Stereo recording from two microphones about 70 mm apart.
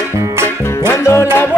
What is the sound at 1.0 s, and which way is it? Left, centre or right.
Music, left.